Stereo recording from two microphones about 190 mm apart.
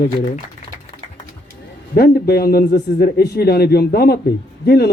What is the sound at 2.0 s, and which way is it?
A man's voice, 55° left (ahead or behind).